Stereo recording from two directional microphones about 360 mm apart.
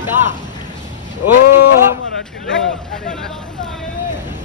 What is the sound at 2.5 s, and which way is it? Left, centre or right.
Speech, left.